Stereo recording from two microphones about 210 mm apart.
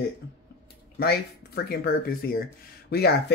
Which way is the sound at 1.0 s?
45° left (ahead or behind).